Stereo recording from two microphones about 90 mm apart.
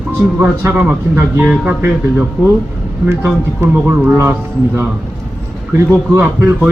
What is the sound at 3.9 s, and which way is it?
Speech, 25° right (ahead or behind).